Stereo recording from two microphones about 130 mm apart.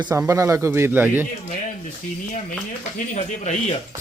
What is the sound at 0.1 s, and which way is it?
A man's voice, 20° right (ahead or behind).